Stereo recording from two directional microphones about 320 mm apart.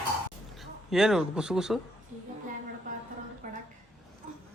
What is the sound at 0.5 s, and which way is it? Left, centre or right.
Speech, centre.